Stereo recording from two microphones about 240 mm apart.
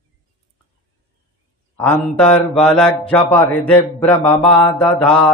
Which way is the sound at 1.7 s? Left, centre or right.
Centre.